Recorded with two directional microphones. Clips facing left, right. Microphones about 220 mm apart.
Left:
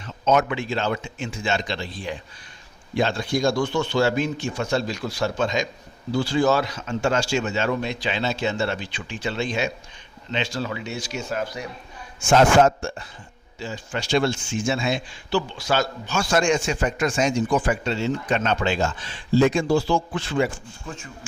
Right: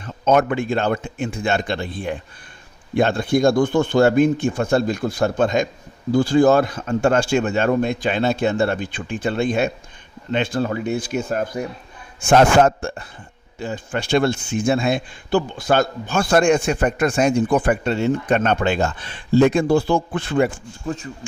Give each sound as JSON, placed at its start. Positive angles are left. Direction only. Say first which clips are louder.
{"t": 0.0, "sound": "speech", "louder": "right 4 dB", "side_deg": -50}
{"t": 20.8, "sound": "speech", "louder": "right 10 dB", "side_deg": -35}